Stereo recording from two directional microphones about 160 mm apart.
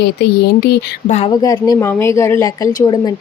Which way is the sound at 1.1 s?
45° left (ahead or behind).